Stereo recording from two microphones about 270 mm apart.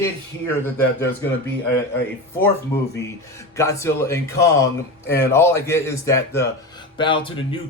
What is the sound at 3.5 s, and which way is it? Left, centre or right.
Speech, centre.